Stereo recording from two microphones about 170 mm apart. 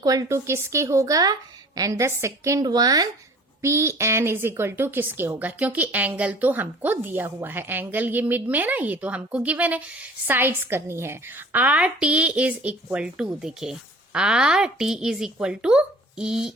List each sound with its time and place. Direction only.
0.0 s a woman's voice: 20° right (ahead or behind); by 16.5 s 5° right (ahead or behind)